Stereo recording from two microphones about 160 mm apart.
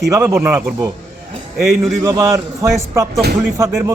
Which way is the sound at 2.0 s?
15° right (ahead or behind).